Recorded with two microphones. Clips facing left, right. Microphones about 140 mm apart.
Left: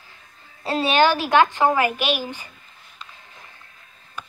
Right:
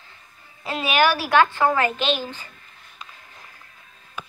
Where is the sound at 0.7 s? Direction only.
30° left (ahead or behind); by 2.5 s 15° left (ahead or behind).